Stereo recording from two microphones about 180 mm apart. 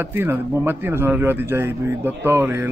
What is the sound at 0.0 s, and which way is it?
Speech, 10° right (ahead or behind).